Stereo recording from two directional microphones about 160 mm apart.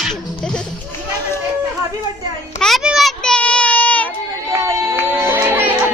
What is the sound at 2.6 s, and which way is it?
Child singing, centre (ahead or behind).